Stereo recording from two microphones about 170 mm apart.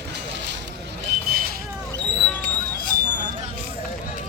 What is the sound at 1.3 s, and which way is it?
Vehicle, 65° right (ahead or behind).